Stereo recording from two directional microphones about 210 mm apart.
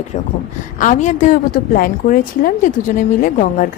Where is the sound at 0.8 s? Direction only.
35° left (ahead or behind).